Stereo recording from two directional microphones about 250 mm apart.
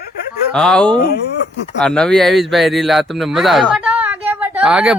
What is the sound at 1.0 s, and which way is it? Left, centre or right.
Speech, left.